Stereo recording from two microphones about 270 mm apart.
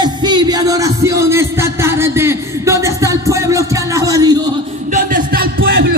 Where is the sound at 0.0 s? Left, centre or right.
Centre.